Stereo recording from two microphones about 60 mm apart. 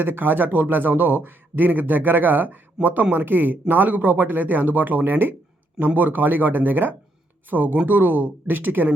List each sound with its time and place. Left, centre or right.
0.0 s a man's voice: right